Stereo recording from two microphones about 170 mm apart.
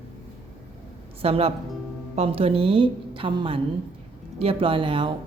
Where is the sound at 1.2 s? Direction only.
35° right (ahead or behind).